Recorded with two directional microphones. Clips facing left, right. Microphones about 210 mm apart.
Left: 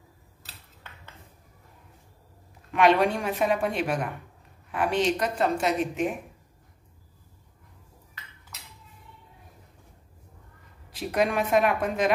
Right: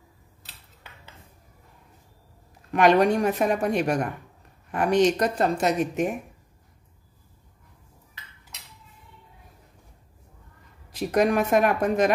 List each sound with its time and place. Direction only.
2.7 s a woman's voice: 40° right (ahead or behind)
11.1 s a woman's voice: 45° right (ahead or behind)